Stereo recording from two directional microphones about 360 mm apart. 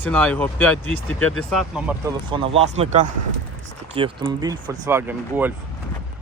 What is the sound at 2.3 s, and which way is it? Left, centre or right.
Speech, centre.